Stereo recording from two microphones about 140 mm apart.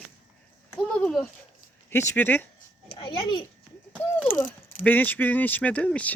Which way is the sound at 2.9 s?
40° left (ahead or behind).